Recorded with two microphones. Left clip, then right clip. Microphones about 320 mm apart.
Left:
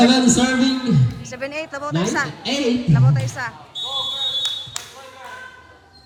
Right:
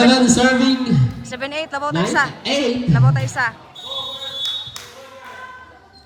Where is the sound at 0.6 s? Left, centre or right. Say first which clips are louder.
Right 2 dB; right.